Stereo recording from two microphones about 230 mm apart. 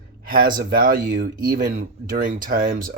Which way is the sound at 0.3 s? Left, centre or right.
Right.